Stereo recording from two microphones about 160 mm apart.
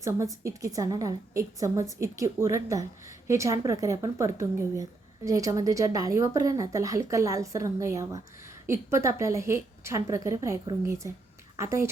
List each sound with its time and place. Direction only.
0.0 s a woman's voice: 20° right (ahead or behind)